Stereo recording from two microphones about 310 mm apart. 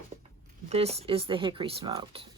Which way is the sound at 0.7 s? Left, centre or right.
Centre.